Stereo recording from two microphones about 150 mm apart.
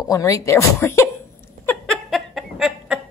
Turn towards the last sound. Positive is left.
turn(degrees=-5)  # may be behind; listen again after turning